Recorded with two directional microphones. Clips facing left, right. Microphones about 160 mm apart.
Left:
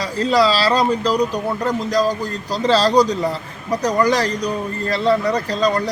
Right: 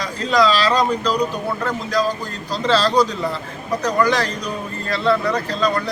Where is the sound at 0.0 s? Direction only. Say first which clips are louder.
Left 1 dB; 35° left (ahead or behind).